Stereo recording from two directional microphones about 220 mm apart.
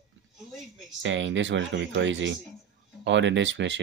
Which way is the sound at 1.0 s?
55° right (ahead or behind).